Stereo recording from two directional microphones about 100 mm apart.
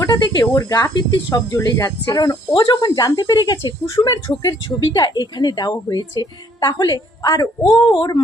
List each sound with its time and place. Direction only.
0.0 s a woman's voice: 40° left (ahead or behind)
7.6 s speech: 55° left (ahead or behind)